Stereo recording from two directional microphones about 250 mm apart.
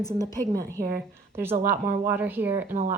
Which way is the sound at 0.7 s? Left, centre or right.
Right.